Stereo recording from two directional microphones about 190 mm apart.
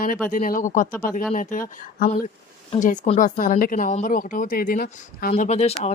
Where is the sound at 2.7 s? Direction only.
35° left (ahead or behind).